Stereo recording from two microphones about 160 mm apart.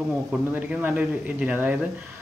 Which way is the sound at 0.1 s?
5° right (ahead or behind).